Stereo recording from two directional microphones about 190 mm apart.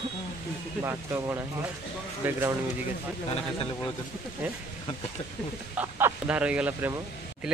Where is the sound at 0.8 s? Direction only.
15° right (ahead or behind).